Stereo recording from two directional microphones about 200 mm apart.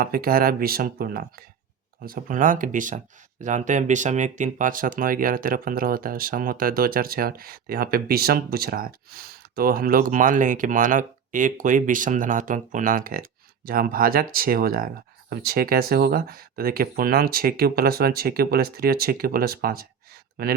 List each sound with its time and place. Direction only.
0.0 s speech: 45° right (ahead or behind)